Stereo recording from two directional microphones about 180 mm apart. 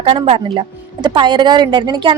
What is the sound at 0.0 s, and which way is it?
A woman's voice, 30° right (ahead or behind).